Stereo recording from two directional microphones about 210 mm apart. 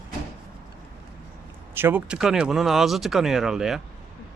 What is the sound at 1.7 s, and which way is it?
Speech, 10° right (ahead or behind).